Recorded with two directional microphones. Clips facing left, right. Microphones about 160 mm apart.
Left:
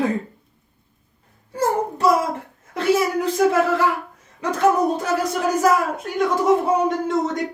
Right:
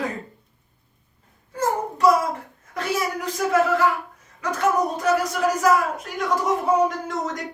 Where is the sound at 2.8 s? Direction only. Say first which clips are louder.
Left 7 dB; 25° left (ahead or behind).